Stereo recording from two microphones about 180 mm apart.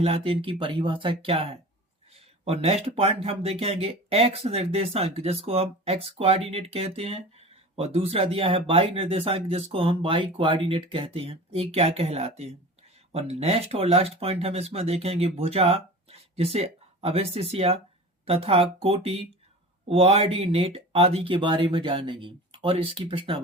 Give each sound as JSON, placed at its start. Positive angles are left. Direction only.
{"t": 0.0, "sound": "speech", "side_deg": -30}